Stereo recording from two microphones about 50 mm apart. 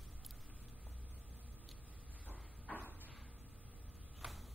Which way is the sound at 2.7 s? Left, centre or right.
Left.